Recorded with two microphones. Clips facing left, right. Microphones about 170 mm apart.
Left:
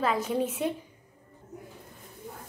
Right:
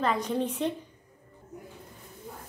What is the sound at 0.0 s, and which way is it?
Speech, 5° left (ahead or behind).